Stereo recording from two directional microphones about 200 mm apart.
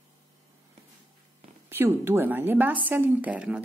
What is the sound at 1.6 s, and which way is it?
A woman's voice, 10° right (ahead or behind).